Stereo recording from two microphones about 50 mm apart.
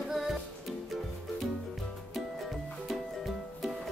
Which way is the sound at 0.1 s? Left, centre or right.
Centre.